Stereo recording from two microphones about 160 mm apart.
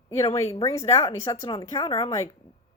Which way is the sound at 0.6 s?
20° left (ahead or behind).